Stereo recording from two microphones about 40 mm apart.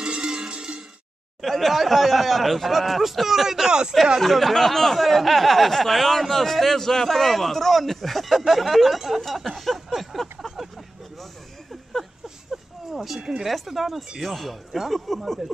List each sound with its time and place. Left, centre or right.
0.0 s music: right
1.4 s speech: centre
4.2 s speech: centre
11.7 s a sound: centre
13.4 s speech: centre